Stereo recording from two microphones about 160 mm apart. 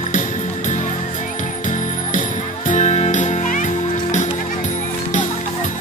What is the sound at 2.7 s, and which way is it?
Music, 45° left (ahead or behind).